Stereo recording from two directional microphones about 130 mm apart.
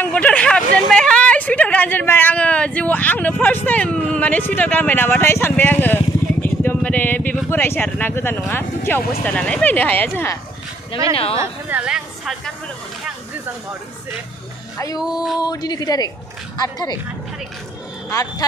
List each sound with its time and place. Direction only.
0.0 s speech: 10° left (ahead or behind)
6.4 s vehicle: 15° left (ahead or behind)
7.4 s speech: 20° left (ahead or behind)
11.3 s a woman's voice: 20° right (ahead or behind)
11.8 s a woman's voice: 5° right (ahead or behind)
15.3 s speech: 30° left (ahead or behind)